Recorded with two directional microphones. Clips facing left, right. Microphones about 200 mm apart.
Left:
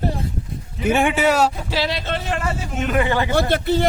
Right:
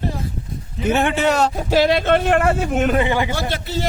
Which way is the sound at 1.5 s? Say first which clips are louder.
Right 8 dB; 50° right (ahead or behind).